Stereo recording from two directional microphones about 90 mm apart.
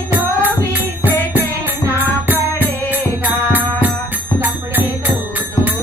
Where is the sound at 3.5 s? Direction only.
20° right (ahead or behind).